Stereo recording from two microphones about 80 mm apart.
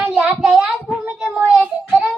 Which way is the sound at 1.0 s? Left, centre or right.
Centre.